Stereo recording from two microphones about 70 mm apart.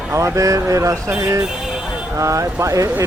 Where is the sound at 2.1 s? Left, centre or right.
Right.